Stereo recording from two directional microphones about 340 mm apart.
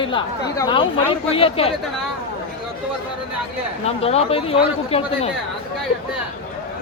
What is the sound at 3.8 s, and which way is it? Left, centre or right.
A man's voice, centre.